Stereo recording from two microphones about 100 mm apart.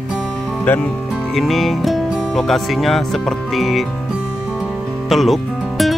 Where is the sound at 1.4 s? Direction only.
Centre (ahead or behind).